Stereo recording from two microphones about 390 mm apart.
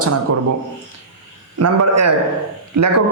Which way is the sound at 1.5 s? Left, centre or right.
Right.